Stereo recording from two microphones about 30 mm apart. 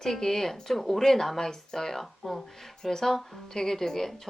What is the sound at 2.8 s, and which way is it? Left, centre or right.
Speech, centre.